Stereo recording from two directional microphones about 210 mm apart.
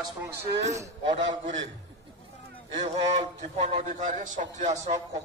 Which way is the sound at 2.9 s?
30° right (ahead or behind).